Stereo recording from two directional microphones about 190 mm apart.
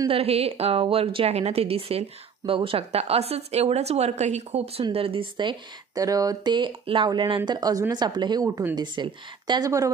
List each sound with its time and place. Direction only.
0.1 s a woman's voice: 30° right (ahead or behind)